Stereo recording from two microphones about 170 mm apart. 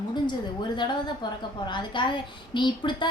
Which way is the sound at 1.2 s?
25° left (ahead or behind).